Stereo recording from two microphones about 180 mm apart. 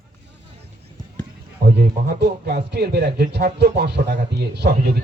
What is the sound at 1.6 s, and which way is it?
A man's voice, 65° right (ahead or behind).